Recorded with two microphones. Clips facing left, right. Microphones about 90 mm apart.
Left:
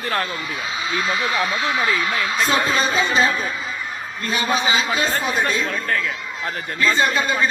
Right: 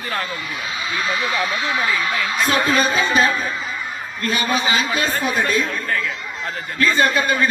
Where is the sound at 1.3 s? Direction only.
20° left (ahead or behind).